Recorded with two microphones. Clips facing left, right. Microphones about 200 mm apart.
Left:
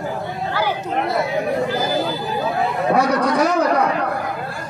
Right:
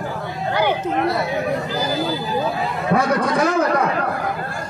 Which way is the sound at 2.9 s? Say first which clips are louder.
Even; 50° right (ahead or behind).